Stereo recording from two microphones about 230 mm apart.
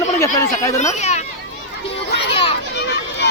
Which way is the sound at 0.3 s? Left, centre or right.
Centre.